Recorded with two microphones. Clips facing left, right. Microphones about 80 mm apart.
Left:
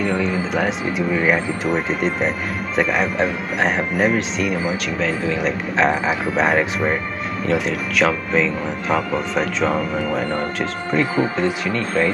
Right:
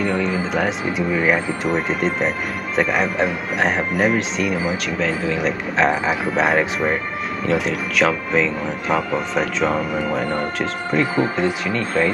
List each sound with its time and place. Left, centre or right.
0.0 s speech: centre